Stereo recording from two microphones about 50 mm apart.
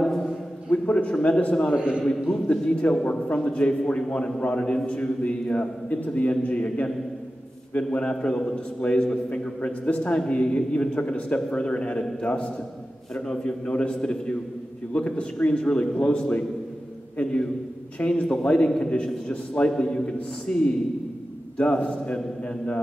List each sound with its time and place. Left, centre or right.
0.7 s a sound: left
1.1 s a man's voice: left
1.8 s a man's voice: centre
2.4 s a man's voice: centre